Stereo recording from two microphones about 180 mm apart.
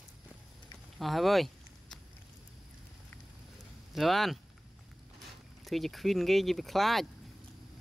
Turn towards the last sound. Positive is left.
turn(degrees=0)  # may be behind; listen again after turning